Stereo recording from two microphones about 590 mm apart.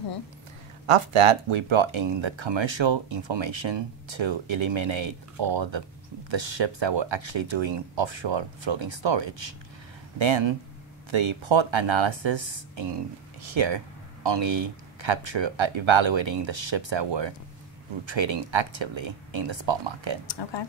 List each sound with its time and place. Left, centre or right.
0.8 s speech: right
20.2 s speech: left